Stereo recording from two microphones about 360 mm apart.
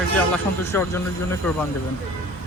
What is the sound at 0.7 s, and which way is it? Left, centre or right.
Speech, centre.